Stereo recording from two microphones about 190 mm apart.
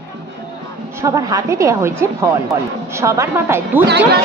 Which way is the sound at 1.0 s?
20° right (ahead or behind).